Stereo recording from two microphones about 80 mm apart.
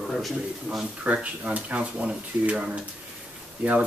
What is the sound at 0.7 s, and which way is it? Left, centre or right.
Speech, centre.